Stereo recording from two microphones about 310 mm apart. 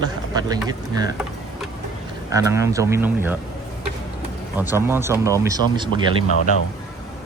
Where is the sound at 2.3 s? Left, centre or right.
Centre.